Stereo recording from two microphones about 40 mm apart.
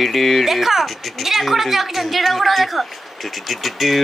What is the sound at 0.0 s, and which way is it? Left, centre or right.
Speech, centre.